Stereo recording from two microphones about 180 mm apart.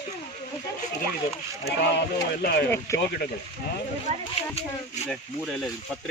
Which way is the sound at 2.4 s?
60° left (ahead or behind).